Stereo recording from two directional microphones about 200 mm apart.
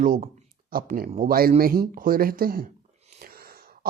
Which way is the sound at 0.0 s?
40° right (ahead or behind).